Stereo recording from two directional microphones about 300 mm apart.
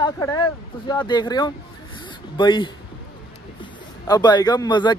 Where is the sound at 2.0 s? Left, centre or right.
Centre.